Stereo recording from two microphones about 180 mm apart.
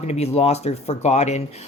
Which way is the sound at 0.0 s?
35° left (ahead or behind).